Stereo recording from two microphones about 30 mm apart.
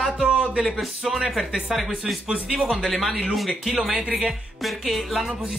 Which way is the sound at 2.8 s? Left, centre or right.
Centre.